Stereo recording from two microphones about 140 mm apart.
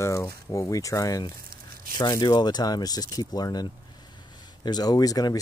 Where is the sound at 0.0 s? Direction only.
20° left (ahead or behind).